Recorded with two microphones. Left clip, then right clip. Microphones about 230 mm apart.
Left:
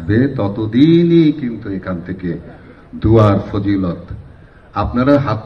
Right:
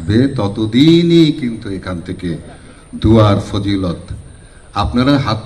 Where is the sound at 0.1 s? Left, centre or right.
Right.